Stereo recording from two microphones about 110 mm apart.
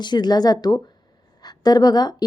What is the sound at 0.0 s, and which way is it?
A woman's voice, 40° left (ahead or behind).